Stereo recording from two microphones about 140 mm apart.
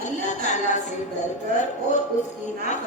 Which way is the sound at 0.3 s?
60° left (ahead or behind).